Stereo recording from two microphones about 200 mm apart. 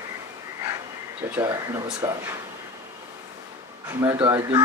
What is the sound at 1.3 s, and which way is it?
Speech, 15° right (ahead or behind).